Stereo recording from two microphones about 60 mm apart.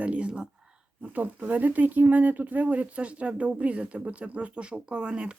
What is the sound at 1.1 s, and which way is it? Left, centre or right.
Speech, right.